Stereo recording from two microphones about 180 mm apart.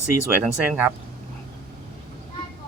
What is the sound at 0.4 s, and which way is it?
Speech, 5° right (ahead or behind).